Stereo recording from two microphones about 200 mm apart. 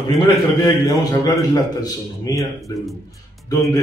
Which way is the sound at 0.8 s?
20° left (ahead or behind).